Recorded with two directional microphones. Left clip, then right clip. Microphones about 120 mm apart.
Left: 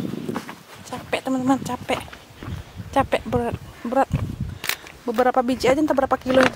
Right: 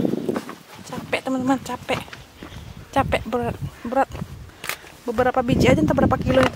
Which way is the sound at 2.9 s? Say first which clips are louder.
Left 1 dB; centre (ahead or behind).